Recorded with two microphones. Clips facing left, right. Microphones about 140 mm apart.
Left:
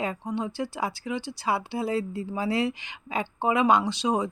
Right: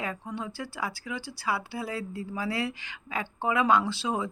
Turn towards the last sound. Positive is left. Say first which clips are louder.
# left 4 dB
turn(degrees=20)  # may be behind; listen again after turning